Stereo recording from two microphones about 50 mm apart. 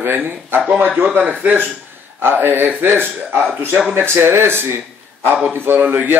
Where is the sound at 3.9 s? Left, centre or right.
Right.